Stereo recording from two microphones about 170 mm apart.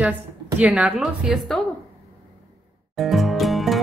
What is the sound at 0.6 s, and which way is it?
A woman's voice, 5° right (ahead or behind).